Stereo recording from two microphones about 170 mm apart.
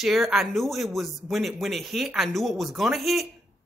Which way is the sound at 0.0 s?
Centre (ahead or behind).